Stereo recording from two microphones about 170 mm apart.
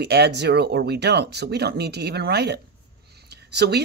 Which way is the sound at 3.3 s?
80° right.